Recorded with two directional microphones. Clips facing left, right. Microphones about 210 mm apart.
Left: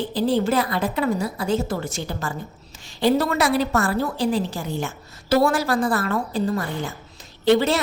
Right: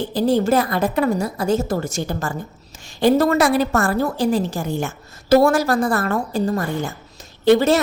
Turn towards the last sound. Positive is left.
turn(degrees=-45)  # may be behind; listen again after turning